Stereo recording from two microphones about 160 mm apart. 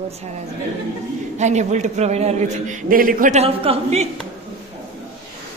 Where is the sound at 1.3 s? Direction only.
45° right (ahead or behind).